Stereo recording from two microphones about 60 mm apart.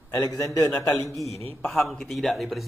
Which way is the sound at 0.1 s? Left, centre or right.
Left.